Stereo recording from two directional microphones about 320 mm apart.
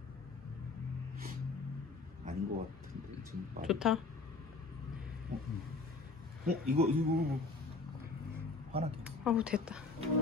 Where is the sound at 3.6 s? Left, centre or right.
Centre.